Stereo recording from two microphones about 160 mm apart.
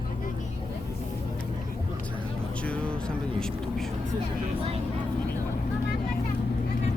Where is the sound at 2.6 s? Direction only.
5° left (ahead or behind).